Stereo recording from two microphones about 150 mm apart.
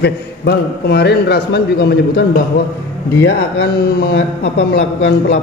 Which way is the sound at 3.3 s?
90° left.